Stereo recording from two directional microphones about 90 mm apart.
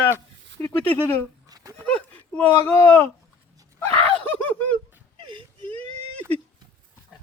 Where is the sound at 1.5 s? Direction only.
45° right (ahead or behind).